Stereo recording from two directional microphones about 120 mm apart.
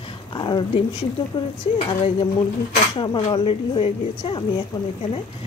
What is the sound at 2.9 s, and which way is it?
A woman's voice, 40° left (ahead or behind).